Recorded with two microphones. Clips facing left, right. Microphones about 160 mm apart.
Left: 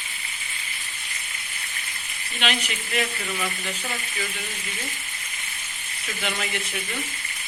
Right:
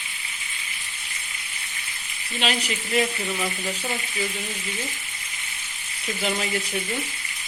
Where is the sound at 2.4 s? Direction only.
30° right (ahead or behind).